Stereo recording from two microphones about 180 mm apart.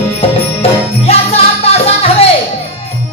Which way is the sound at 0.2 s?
30° left (ahead or behind).